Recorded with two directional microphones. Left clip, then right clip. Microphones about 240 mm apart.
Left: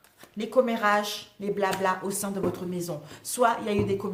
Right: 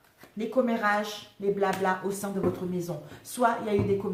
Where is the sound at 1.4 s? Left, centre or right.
Left.